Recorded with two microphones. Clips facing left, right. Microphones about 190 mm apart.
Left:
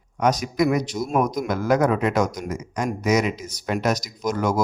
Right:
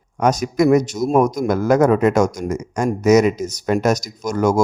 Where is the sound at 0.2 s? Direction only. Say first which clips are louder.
Right 4 dB; 45° right (ahead or behind).